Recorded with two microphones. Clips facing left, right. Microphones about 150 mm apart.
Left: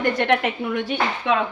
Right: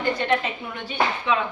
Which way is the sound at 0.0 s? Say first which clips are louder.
Left 3 dB; 65° left (ahead or behind).